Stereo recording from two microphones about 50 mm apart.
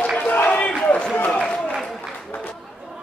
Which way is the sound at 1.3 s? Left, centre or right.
Centre.